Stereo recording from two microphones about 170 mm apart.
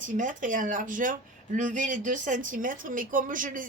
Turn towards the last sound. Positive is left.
turn(degrees=-50)  # may be behind; listen again after turning